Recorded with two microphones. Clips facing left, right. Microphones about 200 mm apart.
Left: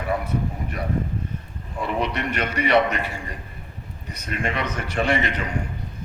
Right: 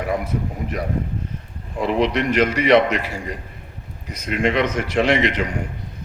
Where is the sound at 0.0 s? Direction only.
90° right.